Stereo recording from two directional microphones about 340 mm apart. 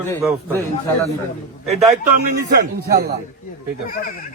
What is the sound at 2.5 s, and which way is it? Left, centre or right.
Speech, right.